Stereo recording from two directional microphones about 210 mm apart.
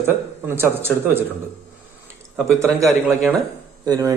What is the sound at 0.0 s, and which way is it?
A man's voice, 10° right (ahead or behind).